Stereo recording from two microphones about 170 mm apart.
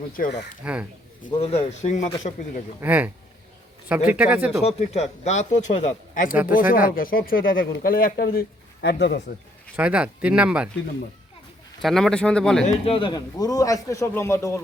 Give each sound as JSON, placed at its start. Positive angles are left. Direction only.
{"t": 0.2, "sound": "speech", "side_deg": 55}
{"t": 0.6, "sound": "speech", "side_deg": -5}
{"t": 1.3, "sound": "a man's voice", "side_deg": 35}
{"t": 2.8, "sound": "speech", "side_deg": -10}
{"t": 4.6, "sound": "a man's voice", "side_deg": 40}
{"t": 9.7, "sound": "speech", "side_deg": -5}
{"t": 11.8, "sound": "speech", "side_deg": 0}
{"t": 12.6, "sound": "speech", "side_deg": 35}